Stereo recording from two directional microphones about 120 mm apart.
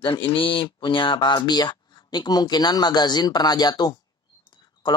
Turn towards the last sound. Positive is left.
turn(degrees=40)  # may be behind; listen again after turning